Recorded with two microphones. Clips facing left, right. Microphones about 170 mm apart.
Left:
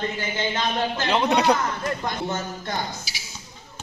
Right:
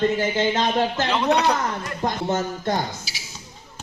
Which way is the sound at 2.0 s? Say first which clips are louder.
Right 4 dB; 35° right (ahead or behind).